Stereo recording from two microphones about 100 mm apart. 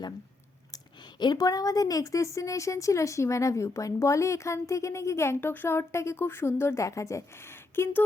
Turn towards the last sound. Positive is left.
turn(degrees=25)  # may be behind; listen again after turning